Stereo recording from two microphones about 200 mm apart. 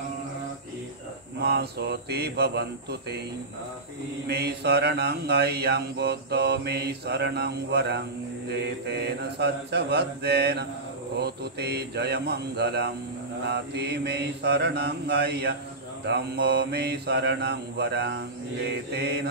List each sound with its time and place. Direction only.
1.4 s speech: 55° right (ahead or behind)
4.3 s mantra: 55° right (ahead or behind)